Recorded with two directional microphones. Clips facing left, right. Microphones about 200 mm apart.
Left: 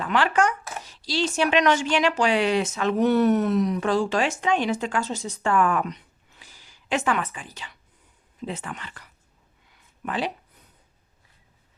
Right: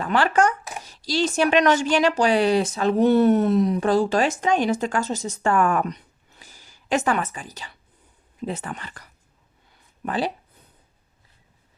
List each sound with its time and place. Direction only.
0.0 s a woman's voice: 40° right (ahead or behind)